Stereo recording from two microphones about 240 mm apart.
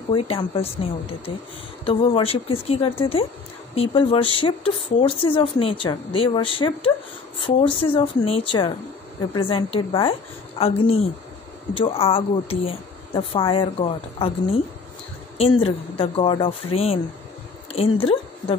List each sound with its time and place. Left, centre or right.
0.1 s a woman's voice: left